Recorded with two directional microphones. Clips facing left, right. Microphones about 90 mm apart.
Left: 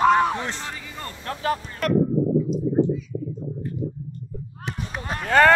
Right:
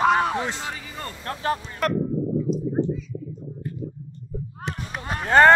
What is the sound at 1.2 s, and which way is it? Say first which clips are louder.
Speech: left 1 dB; 35° right (ahead or behind).